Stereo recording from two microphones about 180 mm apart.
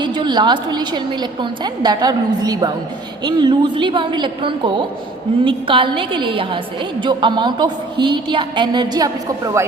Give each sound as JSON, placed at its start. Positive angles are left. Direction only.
{"t": 0.0, "sound": "a woman's voice", "side_deg": -25}